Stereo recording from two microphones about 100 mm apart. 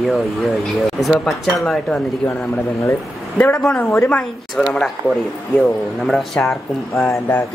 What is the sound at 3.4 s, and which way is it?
Speech, 10° left (ahead or behind).